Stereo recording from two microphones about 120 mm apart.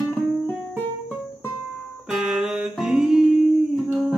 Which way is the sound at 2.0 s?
5° right (ahead or behind).